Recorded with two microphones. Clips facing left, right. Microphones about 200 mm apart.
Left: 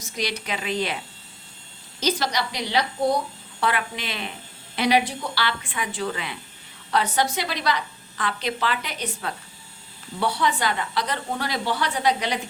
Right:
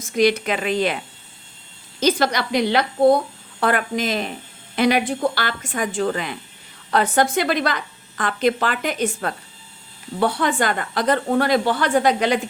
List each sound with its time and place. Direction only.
0.0 s a woman's voice: 50° right (ahead or behind)
2.0 s a woman's voice: 55° right (ahead or behind)